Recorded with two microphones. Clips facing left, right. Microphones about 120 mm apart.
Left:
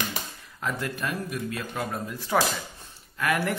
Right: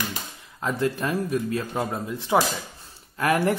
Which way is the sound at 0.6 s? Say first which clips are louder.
Right 6 dB; 30° right (ahead or behind).